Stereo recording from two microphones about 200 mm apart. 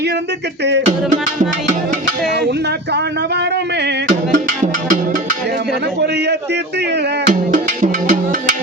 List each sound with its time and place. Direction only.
0.6 s music: 60° right (ahead or behind)
2.2 s speech: 55° right (ahead or behind)
4.1 s music: 40° right (ahead or behind)
6.0 s a man's voice: 55° right (ahead or behind)
7.3 s music: 40° right (ahead or behind)